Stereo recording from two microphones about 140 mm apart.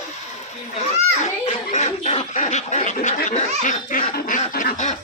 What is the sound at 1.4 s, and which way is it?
Snicker, 55° left (ahead or behind).